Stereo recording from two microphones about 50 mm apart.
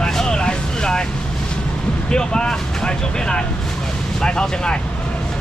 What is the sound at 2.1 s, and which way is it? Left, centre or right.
Vehicle, centre.